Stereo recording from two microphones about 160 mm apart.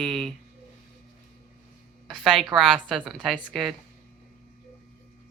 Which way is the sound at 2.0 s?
Centre (ahead or behind).